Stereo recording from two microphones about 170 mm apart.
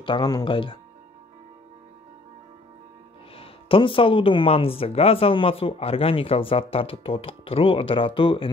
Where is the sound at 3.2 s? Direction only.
35° left (ahead or behind).